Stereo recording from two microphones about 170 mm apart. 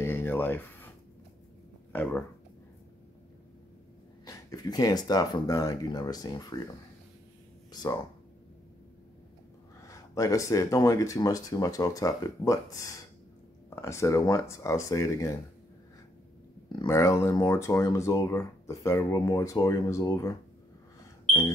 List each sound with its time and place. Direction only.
0.0 s a sound: 10° left (ahead or behind)
1.9 s speech: 10° left (ahead or behind)
4.3 s speech: 20° left (ahead or behind)
7.7 s speech: 25° left (ahead or behind)
9.8 s speech: 20° left (ahead or behind)
16.6 s speech: 25° left (ahead or behind)